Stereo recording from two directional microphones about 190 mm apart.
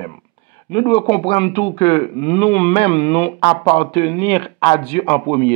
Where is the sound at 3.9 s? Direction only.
15° left (ahead or behind).